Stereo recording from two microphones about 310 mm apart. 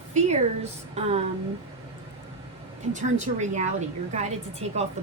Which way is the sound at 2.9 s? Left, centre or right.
Right.